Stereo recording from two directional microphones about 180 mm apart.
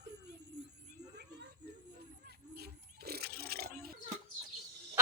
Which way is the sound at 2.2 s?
60° right (ahead or behind).